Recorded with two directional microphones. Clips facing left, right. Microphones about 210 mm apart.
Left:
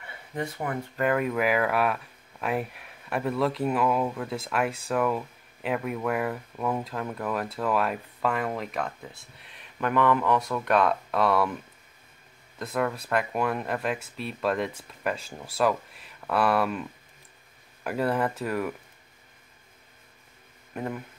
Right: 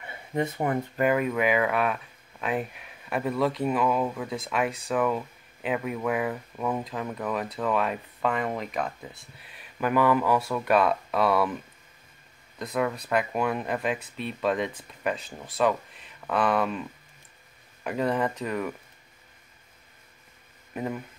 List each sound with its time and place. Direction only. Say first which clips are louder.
0.0 s speech: right 4 dB; 25° right (ahead or behind)
1.0 s speech: right 1 dB; 5° right (ahead or behind)
12.5 s speech: even; centre (ahead or behind)
17.8 s speech: even; 5° left (ahead or behind)
20.7 s speech: right 1 dB; 5° right (ahead or behind)